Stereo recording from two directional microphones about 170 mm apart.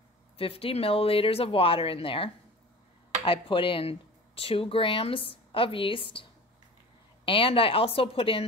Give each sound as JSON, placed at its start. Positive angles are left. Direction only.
{"t": 0.4, "sound": "speech", "side_deg": 35}
{"t": 7.2, "sound": "speech", "side_deg": 30}